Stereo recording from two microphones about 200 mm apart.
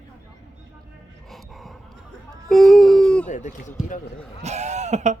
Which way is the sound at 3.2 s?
40° left (ahead or behind).